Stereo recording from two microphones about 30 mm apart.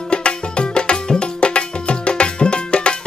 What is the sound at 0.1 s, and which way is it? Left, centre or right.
Music, left.